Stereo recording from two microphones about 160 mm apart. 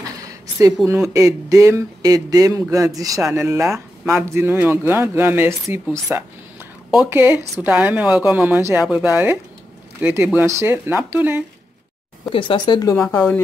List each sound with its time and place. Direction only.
0.0 s a sound: 20° right (ahead or behind)
1.1 s speech: 20° right (ahead or behind)
12.3 s speech: 30° left (ahead or behind)
12.9 s speech: 15° left (ahead or behind)